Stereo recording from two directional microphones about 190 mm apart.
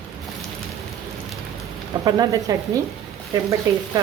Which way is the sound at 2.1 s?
20° right (ahead or behind).